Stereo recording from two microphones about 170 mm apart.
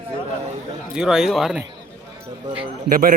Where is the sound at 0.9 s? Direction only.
5° right (ahead or behind).